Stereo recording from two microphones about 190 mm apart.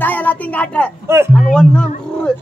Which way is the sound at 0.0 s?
10° left (ahead or behind).